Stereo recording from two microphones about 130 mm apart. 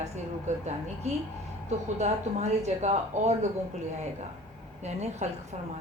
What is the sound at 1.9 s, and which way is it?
Speech, 60° right (ahead or behind).